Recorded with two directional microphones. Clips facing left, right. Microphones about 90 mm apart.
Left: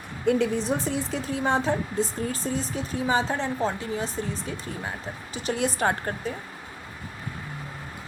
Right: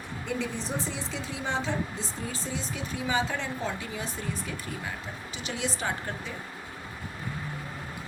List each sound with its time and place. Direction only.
0.3 s a woman's voice: 55° left (ahead or behind)